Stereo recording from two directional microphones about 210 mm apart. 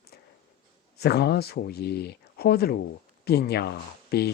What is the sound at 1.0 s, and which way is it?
Speech, 50° left (ahead or behind).